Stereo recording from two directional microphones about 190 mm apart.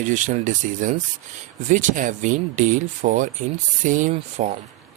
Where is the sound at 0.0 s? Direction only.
40° right (ahead or behind).